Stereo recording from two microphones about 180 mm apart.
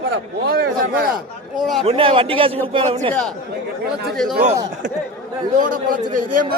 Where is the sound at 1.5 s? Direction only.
Centre (ahead or behind).